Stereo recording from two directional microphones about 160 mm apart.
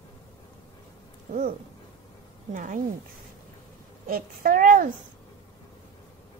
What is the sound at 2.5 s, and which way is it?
Speech, 55° right (ahead or behind).